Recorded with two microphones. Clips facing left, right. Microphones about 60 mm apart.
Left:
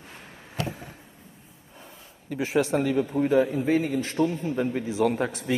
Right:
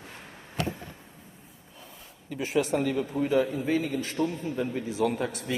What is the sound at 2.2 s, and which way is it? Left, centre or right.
A man's voice, left.